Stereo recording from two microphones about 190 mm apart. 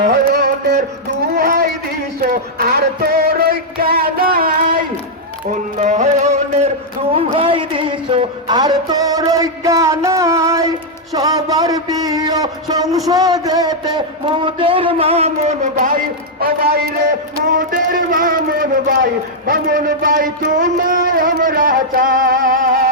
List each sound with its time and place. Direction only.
0.1 s music: 55° right (ahead or behind)
5.5 s music: 40° right (ahead or behind)
16.4 s speech: 55° right (ahead or behind)